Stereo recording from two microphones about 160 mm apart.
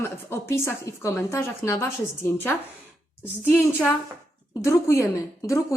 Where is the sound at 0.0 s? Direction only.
15° left (ahead or behind).